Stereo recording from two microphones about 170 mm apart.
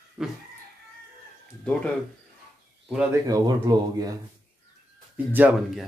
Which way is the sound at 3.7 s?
20° right (ahead or behind).